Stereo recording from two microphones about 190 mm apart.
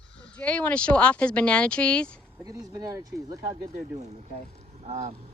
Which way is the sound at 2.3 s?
20° right (ahead or behind).